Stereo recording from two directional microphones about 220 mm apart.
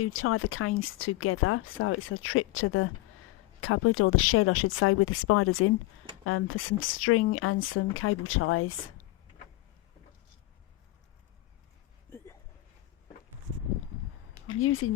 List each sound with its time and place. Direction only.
0.0 s speech: 70° left (ahead or behind)
12.1 s a sound: 15° left (ahead or behind)
14.6 s speech: 70° left (ahead or behind)